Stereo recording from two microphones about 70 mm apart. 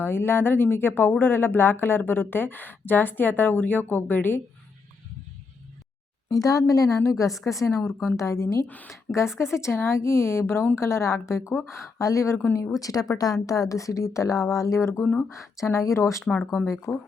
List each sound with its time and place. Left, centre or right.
0.0 s speech: left
6.3 s a woman's voice: left
8.6 s speech: left
8.9 s speech: left
12.8 s a woman's voice: left
16.9 s speech: left